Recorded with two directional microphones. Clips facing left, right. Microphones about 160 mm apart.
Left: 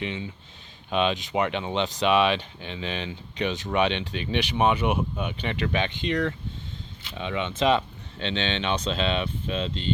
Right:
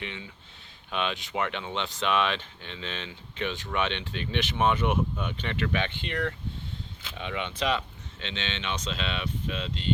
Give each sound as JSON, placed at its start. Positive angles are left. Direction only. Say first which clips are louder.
{"t": 0.0, "sound": "speech", "louder": "left 7 dB", "side_deg": 20}